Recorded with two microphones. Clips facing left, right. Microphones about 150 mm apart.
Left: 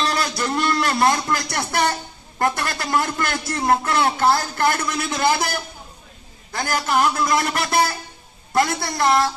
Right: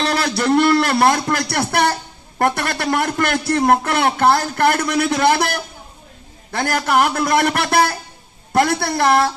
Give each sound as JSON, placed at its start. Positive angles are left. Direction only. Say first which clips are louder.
{"t": 0.0, "sound": "a sound", "louder": "right 4 dB", "side_deg": -65}
{"t": 0.5, "sound": "a man's voice", "louder": "right 9 dB", "side_deg": -65}
{"t": 6.6, "sound": "a man's voice", "louder": "right 3 dB", "side_deg": -60}